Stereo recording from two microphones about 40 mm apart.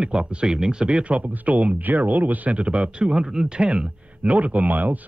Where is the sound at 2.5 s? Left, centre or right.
Right.